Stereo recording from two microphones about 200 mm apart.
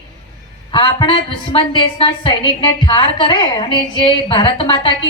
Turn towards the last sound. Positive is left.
turn(degrees=25)  # may be behind; listen again after turning